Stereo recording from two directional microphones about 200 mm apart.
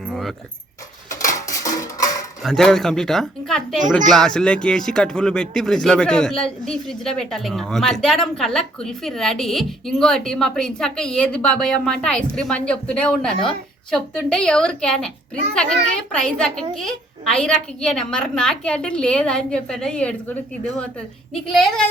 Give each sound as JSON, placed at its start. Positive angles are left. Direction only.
{"t": 0.1, "sound": "keys jangling", "side_deg": 0}
{"t": 1.3, "sound": "music", "side_deg": 15}
{"t": 2.4, "sound": "a man's voice", "side_deg": 0}